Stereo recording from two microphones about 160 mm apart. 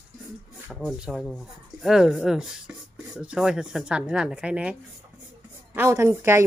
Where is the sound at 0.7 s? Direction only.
Centre (ahead or behind).